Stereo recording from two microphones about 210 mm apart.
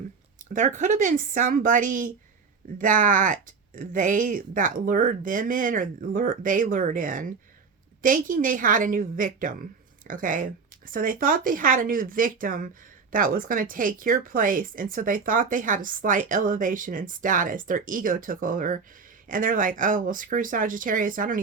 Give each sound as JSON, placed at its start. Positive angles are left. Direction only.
{"t": 0.5, "sound": "speech", "side_deg": -35}